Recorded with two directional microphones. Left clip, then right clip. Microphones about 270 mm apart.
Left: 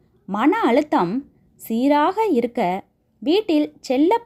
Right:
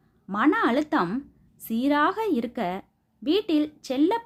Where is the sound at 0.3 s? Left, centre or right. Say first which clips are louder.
Left 4 dB; centre.